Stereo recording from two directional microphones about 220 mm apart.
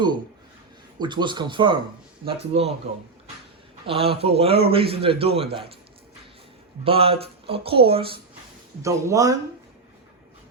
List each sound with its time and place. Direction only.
0.9 s speech: 20° right (ahead or behind)
3.8 s speech: 25° right (ahead or behind)
6.8 s speech: 25° right (ahead or behind)
8.8 s speech: 15° right (ahead or behind)